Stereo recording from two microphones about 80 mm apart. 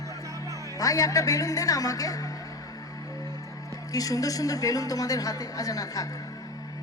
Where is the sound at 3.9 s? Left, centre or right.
Left.